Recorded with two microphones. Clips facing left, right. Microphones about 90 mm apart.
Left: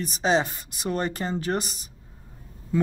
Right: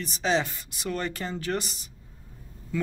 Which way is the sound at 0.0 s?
35° left (ahead or behind).